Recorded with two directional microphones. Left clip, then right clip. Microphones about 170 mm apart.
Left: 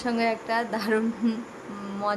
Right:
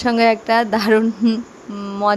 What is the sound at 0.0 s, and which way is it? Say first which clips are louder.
Speech: right 11 dB; 45° right (ahead or behind).